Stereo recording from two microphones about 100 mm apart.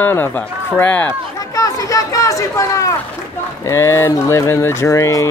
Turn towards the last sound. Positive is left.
turn(degrees=35)  # may be behind; listen again after turning